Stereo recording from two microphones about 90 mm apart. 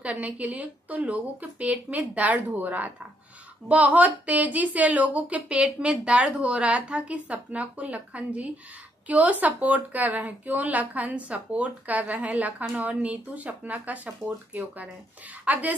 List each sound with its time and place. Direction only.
0.0 s a woman's voice: 15° right (ahead or behind)